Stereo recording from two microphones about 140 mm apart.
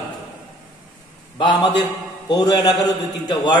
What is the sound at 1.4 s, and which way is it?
A man's voice, 35° left (ahead or behind).